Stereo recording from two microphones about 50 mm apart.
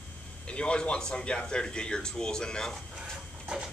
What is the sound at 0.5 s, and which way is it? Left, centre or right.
Speech, left.